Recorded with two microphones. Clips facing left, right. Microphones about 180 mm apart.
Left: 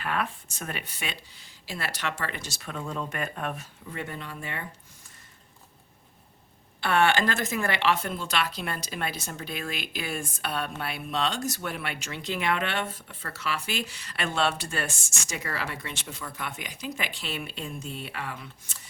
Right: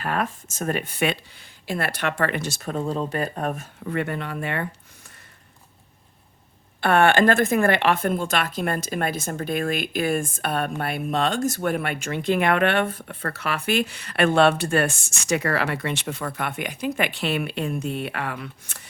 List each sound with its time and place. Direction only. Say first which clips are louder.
0.0 s speech: right 4 dB; 40° right (ahead or behind); by 2.6 s 65° right (ahead or behind)
2.6 s speech: right 6 dB; 40° right (ahead or behind)
3.8 s speech: right 10 dB; 65° right (ahead or behind)
6.8 s speech: right 6 dB; 55° right (ahead or behind)